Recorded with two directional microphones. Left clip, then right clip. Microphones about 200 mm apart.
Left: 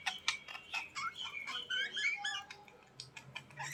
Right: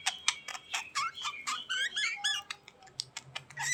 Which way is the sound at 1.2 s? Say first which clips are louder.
Right 5 dB; 45° right (ahead or behind).